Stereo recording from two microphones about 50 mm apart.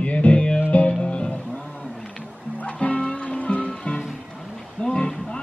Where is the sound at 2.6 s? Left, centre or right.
Left.